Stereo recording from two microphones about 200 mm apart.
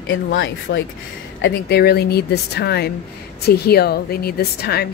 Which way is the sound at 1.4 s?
55° left (ahead or behind).